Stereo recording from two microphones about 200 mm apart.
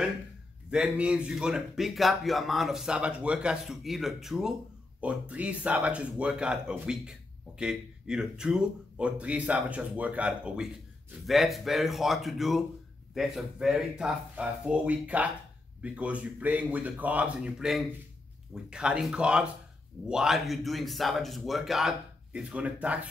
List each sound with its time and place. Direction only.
0.7 s speech: 5° right (ahead or behind)